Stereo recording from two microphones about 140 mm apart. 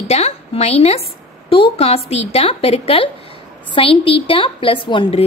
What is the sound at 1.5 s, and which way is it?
A woman's voice, 40° left (ahead or behind).